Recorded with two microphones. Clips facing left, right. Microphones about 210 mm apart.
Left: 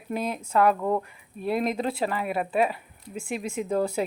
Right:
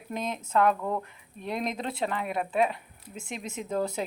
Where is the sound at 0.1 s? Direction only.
10° left (ahead or behind).